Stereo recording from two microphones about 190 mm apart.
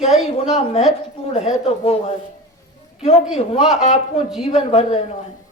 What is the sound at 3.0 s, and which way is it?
Speech, 30° left (ahead or behind).